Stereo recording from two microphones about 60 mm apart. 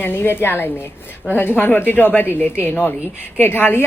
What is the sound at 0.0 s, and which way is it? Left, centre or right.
Speech, left.